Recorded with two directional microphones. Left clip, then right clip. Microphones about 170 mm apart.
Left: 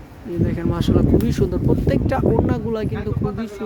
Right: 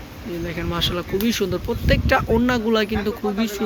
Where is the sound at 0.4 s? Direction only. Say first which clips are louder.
Even; 25° left (ahead or behind).